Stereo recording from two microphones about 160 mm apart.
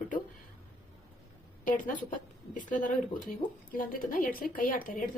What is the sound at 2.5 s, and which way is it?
Speech, 55° left (ahead or behind).